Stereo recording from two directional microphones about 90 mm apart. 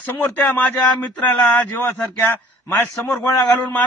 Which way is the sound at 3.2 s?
40° left (ahead or behind).